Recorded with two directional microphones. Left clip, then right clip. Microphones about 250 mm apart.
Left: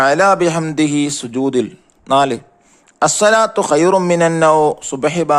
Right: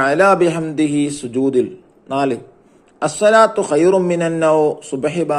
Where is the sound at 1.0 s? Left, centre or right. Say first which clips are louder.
Even; left.